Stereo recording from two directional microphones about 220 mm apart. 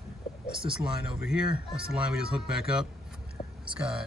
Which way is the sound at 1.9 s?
5° right (ahead or behind).